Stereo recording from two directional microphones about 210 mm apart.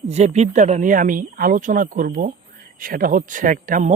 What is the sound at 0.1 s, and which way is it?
Speech, 30° right (ahead or behind).